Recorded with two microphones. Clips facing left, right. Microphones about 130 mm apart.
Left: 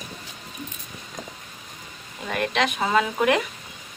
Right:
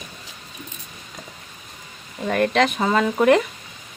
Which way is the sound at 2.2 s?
40° right (ahead or behind).